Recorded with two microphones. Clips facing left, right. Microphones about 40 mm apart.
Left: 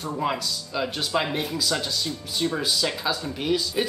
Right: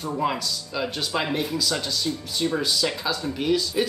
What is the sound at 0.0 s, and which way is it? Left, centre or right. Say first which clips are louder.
Speech: right 1 dB; centre.